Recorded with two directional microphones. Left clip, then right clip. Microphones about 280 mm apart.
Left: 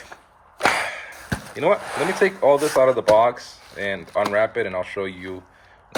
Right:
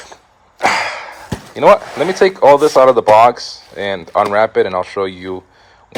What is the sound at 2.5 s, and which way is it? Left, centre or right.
Speech, right.